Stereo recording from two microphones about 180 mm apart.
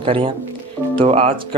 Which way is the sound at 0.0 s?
30° right (ahead or behind).